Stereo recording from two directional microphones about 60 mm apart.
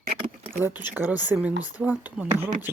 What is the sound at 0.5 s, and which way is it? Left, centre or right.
Speech, right.